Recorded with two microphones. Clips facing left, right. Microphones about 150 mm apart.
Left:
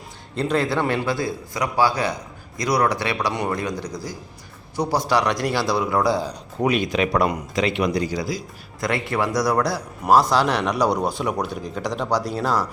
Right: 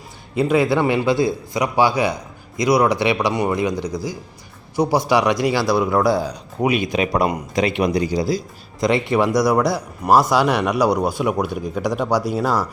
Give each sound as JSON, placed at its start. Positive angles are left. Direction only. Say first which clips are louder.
{"t": 0.3, "sound": "speech", "louder": "right 5 dB", "side_deg": -10}